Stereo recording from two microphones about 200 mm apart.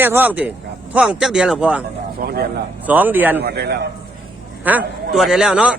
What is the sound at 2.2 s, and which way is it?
Speech, 50° right (ahead or behind).